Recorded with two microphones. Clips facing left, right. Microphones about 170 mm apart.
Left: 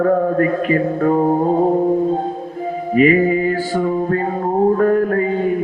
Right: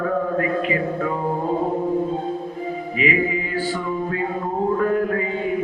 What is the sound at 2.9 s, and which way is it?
Mantra, 45° left (ahead or behind).